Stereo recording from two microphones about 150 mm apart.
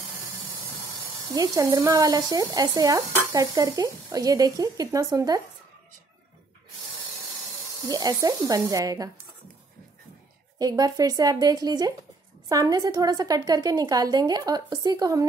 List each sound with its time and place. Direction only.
1.3 s speech: 25° right (ahead or behind)
7.9 s speech: 25° right (ahead or behind)
10.6 s speech: 25° right (ahead or behind)